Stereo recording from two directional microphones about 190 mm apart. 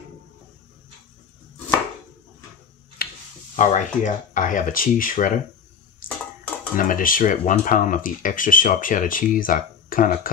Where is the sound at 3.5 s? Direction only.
40° left (ahead or behind).